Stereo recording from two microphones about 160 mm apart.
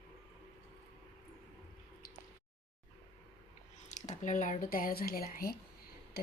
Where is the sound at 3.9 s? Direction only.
50° left (ahead or behind); by 5.5 s 65° left (ahead or behind).